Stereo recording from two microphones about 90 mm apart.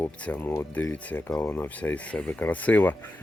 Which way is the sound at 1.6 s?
20° left (ahead or behind).